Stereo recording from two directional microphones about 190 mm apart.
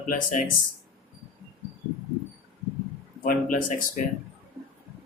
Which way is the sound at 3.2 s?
45° left (ahead or behind).